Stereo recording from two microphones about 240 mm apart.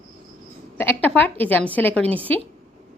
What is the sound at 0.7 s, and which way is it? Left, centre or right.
A woman's voice, centre.